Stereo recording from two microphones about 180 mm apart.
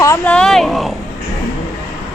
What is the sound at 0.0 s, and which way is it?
Speech, 15° left (ahead or behind).